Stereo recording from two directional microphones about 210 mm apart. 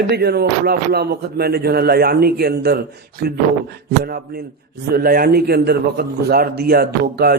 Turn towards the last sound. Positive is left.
turn(degrees=-45)  # may be behind; listen again after turning